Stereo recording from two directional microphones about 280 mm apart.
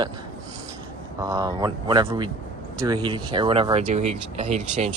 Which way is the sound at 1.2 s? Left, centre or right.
Centre.